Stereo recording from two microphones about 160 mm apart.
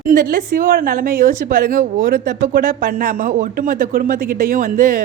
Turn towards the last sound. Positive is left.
turn(degrees=-60)  # may be behind; listen again after turning